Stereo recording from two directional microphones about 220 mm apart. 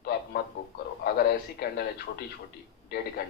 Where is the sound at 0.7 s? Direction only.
45° left (ahead or behind).